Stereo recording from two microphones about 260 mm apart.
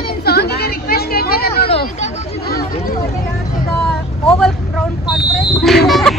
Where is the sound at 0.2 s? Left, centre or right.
Left.